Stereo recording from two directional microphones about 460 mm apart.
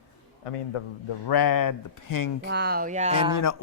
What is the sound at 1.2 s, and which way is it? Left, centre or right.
Speech, left.